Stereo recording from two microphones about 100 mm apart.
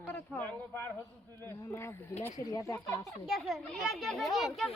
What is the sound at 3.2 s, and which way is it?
A child's voice, centre (ahead or behind).